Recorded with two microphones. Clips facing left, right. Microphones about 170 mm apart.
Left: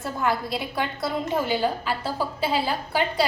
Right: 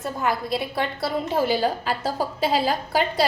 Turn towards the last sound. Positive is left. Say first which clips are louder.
# right 2 dB
turn(degrees=-40)  # may be behind; listen again after turning